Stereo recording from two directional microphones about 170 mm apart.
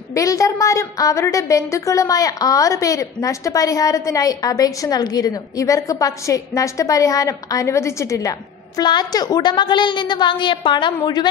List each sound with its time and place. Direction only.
0.1 s a woman's voice: 20° left (ahead or behind)